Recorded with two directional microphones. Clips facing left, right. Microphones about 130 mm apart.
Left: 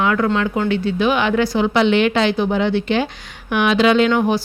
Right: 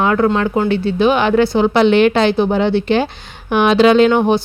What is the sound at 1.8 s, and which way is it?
Speech, 40° right (ahead or behind).